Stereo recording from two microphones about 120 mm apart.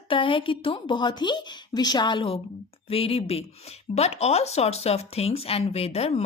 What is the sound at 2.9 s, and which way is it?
Speech, 50° left (ahead or behind).